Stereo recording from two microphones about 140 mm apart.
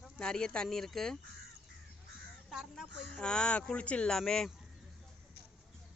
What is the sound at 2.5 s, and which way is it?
Speech, centre (ahead or behind).